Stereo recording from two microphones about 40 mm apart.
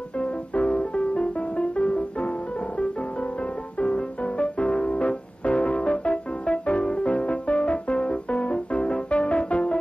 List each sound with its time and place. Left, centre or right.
0.2 s music: left
3.8 s music: left